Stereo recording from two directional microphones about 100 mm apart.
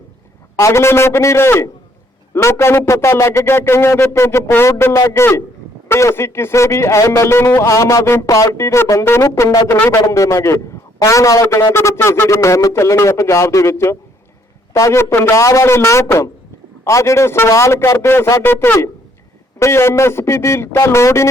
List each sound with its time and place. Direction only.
0.6 s a man's voice: 25° left (ahead or behind)
10.1 s a man's voice: 30° left (ahead or behind)